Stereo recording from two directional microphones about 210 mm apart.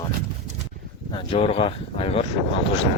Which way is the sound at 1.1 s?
25° left (ahead or behind).